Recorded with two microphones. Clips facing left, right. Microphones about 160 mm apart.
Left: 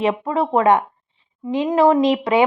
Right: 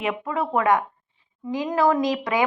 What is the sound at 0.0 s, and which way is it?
A woman's voice, 35° left (ahead or behind).